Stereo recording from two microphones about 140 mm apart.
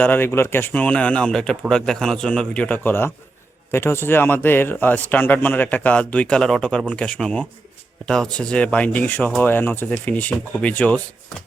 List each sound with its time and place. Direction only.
0.0 s a man's voice: 15° left (ahead or behind)